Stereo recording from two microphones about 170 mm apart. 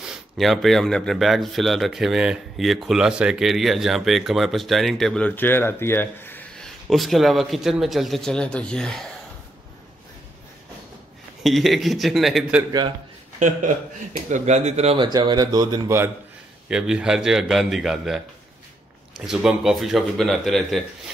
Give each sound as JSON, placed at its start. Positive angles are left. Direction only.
{"t": 0.0, "sound": "speech", "side_deg": 0}
{"t": 6.9, "sound": "speech", "side_deg": 0}
{"t": 11.4, "sound": "speech", "side_deg": 0}
{"t": 14.3, "sound": "speech", "side_deg": -45}
{"t": 15.0, "sound": "speech", "side_deg": -25}
{"t": 16.6, "sound": "speech", "side_deg": -5}